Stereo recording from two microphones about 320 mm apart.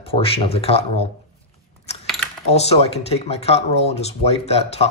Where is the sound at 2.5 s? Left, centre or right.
Centre.